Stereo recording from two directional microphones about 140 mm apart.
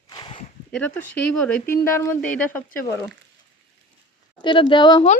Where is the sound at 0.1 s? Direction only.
35° left (ahead or behind).